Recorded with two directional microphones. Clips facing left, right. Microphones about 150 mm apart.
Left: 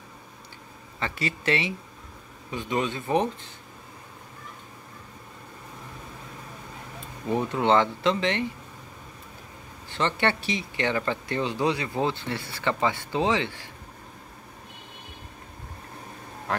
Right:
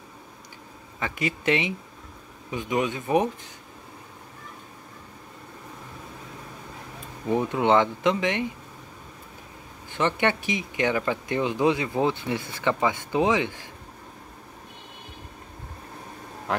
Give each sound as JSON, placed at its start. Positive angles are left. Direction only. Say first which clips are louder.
{"t": 0.9, "sound": "speech", "louder": "right 2 dB", "side_deg": -15}
{"t": 7.2, "sound": "speech", "louder": "right 1 dB", "side_deg": -15}
{"t": 9.8, "sound": "speech", "louder": "right 2 dB", "side_deg": -15}